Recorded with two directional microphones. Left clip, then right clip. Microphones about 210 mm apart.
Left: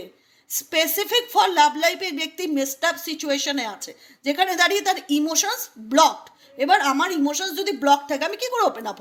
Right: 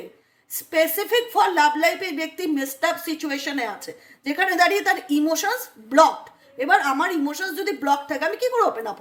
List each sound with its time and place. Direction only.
0.5 s a woman's voice: 35° left (ahead or behind)